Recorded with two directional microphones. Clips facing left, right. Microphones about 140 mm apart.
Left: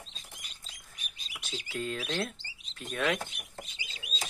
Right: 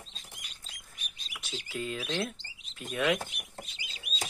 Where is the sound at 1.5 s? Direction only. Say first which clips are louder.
Left 1 dB; centre (ahead or behind).